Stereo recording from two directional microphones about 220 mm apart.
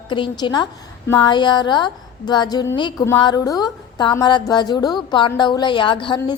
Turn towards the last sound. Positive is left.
turn(degrees=20)  # may be behind; listen again after turning